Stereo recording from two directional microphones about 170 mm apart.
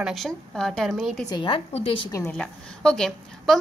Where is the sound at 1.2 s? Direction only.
25° left (ahead or behind).